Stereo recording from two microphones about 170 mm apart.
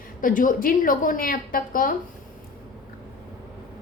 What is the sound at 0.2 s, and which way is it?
A woman's voice, 50° left (ahead or behind).